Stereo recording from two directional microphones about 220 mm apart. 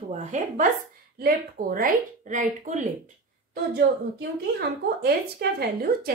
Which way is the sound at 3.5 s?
45° right (ahead or behind).